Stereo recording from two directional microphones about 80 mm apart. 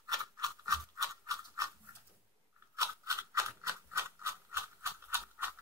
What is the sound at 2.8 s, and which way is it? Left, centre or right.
Toothbrush, right.